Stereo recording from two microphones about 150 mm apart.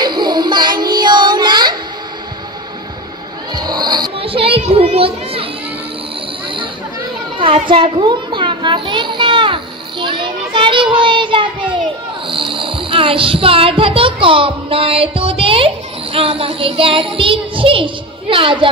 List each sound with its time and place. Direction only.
0.0 s child singing: 30° right (ahead or behind)
3.5 s music: 25° right (ahead or behind)
4.2 s children playing: 40° right (ahead or behind)
7.3 s children playing: 35° right (ahead or behind)
12.3 s speech: 35° right (ahead or behind)